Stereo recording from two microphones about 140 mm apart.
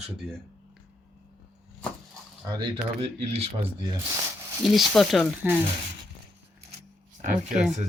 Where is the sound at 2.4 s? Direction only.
30° right (ahead or behind).